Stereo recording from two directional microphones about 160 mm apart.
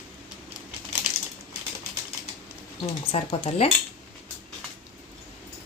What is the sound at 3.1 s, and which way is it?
Speech, 35° left (ahead or behind).